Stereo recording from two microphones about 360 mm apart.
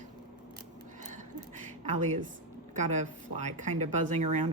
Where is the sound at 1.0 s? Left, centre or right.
Centre.